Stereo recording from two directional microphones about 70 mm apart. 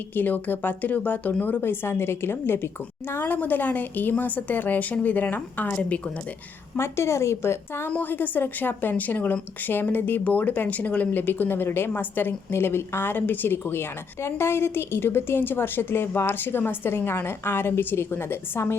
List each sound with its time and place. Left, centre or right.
0.1 s speech: left
6.7 s a woman's voice: left
7.9 s a woman's voice: left